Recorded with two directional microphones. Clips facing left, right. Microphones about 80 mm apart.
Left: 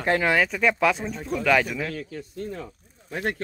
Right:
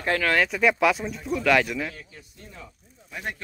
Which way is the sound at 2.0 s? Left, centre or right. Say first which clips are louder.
Left 12 dB; left.